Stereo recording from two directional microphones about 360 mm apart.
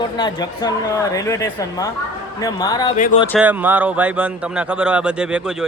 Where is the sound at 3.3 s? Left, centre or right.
Centre.